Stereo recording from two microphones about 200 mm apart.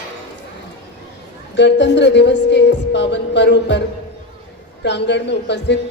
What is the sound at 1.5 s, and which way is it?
Speech, 60° left (ahead or behind).